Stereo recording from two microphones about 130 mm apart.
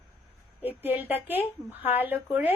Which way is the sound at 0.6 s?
15° right (ahead or behind).